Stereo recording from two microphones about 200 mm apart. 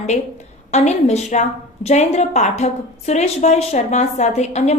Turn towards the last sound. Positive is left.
turn(degrees=35)  # may be behind; listen again after turning